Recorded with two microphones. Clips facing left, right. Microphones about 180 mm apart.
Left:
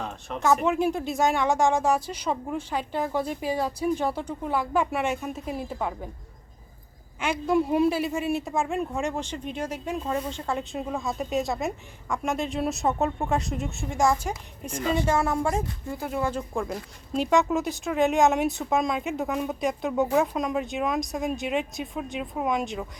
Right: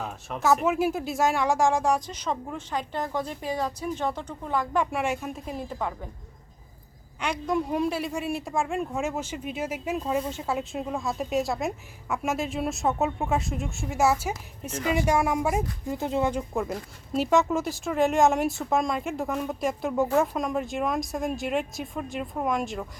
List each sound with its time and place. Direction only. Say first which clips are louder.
0.0 s speech: even; 5° right (ahead or behind)
7.2 s speech: left 3 dB; 5° left (ahead or behind)
15.9 s speech: right 3 dB; 20° right (ahead or behind)
16.3 s speech: right 1 dB; 5° right (ahead or behind)